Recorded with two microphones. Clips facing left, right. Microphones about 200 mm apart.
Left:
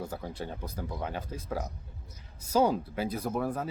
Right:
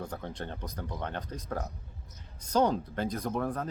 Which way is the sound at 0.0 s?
5° left (ahead or behind).